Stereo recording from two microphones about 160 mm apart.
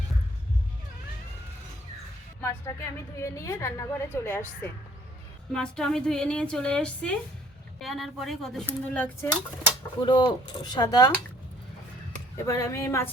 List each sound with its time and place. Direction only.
2.4 s a woman's voice: 15° left (ahead or behind)
10.1 s speech: 30° left (ahead or behind)
12.4 s a woman's voice: 20° left (ahead or behind)